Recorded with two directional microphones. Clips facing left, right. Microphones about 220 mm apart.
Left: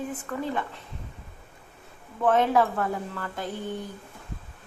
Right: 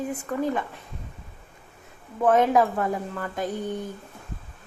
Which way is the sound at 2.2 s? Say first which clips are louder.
Right 2 dB; 20° right (ahead or behind).